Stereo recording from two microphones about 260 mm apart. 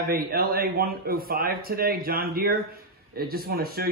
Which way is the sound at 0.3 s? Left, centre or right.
Right.